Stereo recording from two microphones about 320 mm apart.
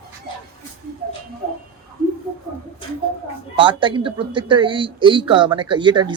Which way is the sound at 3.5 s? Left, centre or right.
Centre.